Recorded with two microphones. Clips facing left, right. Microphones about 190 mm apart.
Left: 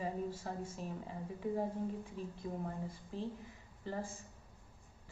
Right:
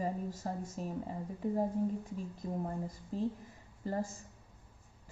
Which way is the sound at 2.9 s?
40° right (ahead or behind).